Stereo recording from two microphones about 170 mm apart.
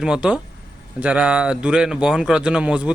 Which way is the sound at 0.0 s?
5° right (ahead or behind).